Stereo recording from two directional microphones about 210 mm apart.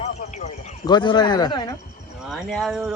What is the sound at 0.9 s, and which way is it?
Speech, 20° left (ahead or behind).